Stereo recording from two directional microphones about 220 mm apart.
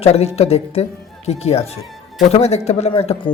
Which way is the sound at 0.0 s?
30° left (ahead or behind).